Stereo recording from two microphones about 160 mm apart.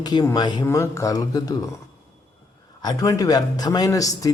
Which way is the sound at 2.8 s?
25° left (ahead or behind).